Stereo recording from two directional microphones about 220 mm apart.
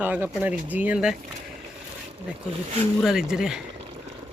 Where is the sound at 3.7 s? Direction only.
25° right (ahead or behind).